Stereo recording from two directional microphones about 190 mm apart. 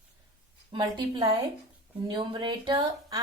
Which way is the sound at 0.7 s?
25° right (ahead or behind).